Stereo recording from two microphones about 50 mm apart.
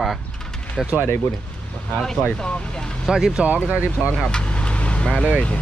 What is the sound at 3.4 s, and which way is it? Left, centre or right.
Speech, right.